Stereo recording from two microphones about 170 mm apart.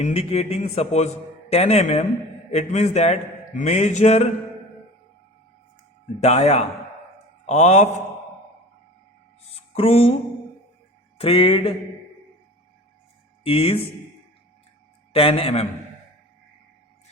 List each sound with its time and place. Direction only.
0.0 s a man's voice: 35° left (ahead or behind)
6.1 s a man's voice: 40° left (ahead or behind)
9.5 s music: 35° left (ahead or behind)
11.2 s a man's voice: 35° left (ahead or behind)
13.4 s speech: 35° left (ahead or behind)
15.1 s a man's voice: 35° left (ahead or behind)